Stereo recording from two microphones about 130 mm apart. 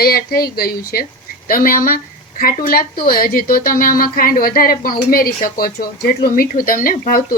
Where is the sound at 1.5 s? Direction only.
90° left.